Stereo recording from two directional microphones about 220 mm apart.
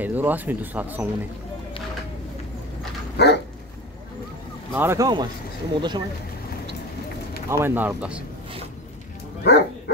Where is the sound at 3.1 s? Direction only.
50° left (ahead or behind).